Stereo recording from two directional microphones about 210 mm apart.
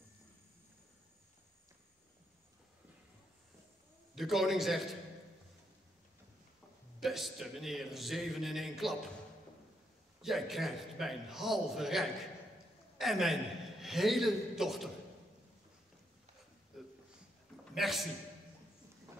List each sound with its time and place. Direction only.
4.1 s a man's voice: centre (ahead or behind)
7.0 s a man's voice: centre (ahead or behind)
10.2 s a man's voice: centre (ahead or behind)
16.7 s a sound: centre (ahead or behind)
17.7 s a man's voice: centre (ahead or behind)